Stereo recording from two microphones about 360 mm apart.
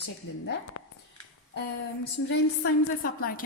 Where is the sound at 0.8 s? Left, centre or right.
Left.